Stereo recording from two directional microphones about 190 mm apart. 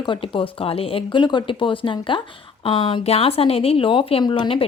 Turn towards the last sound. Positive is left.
turn(degrees=25)  # may be behind; listen again after turning